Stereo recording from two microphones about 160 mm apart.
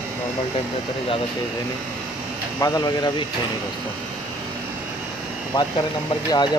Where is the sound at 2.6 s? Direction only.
20° left (ahead or behind).